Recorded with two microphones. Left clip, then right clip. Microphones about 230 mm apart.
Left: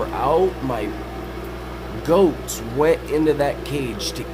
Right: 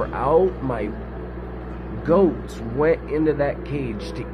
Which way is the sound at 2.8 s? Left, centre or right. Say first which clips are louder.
Left 2 dB; left.